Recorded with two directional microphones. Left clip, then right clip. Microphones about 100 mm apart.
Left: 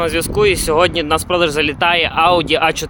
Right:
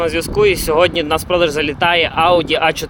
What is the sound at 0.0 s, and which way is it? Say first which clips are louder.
Speech: right 1 dB; 25° left (ahead or behind).